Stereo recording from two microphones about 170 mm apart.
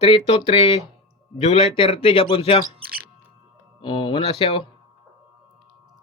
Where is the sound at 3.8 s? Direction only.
25° left (ahead or behind).